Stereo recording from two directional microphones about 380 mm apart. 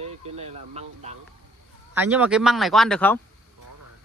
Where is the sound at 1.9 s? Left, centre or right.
Centre.